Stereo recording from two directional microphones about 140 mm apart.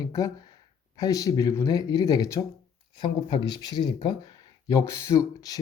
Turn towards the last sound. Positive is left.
turn(degrees=25)  # may be behind; listen again after turning